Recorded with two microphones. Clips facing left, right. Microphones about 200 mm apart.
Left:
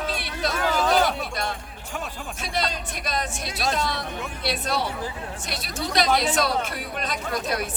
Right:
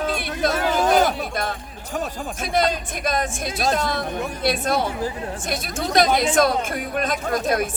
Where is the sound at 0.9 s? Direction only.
50° right (ahead or behind).